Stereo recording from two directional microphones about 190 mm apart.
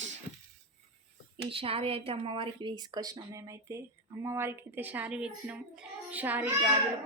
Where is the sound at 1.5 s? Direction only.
30° right (ahead or behind).